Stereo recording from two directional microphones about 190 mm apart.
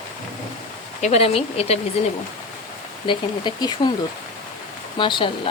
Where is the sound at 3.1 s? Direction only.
25° left (ahead or behind).